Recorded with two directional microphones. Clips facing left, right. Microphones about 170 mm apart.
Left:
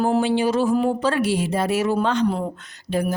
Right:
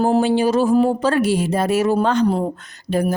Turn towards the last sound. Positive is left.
turn(degrees=-45)  # may be behind; listen again after turning